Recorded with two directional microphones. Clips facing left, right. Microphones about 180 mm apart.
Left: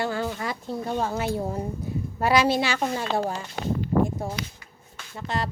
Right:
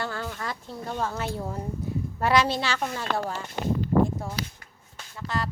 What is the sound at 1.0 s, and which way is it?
A woman's voice, 10° left (ahead or behind).